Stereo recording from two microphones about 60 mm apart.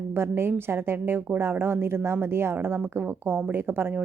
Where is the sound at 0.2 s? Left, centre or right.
Right.